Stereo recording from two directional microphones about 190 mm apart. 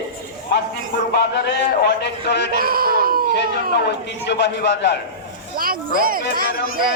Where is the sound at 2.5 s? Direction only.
50° right (ahead or behind).